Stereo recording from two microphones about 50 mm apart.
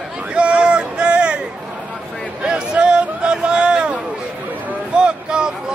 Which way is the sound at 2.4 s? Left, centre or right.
Centre.